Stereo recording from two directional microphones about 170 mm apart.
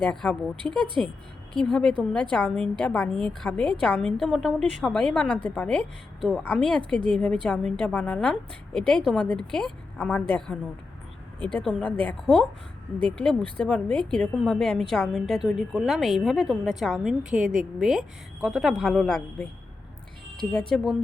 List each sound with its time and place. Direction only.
0.0 s a woman's voice: 5° left (ahead or behind)
20.5 s a woman's voice: 5° left (ahead or behind)